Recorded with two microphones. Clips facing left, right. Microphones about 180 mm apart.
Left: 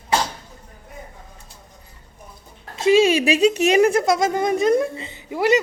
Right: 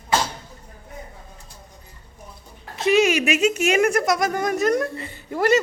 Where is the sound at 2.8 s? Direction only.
25° left (ahead or behind).